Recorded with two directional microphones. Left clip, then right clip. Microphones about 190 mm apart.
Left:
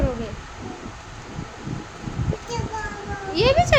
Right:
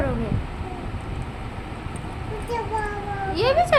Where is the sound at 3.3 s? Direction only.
25° left (ahead or behind).